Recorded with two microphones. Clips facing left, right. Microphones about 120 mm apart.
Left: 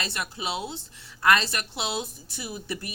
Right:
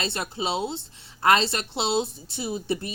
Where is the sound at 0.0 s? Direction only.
25° right (ahead or behind).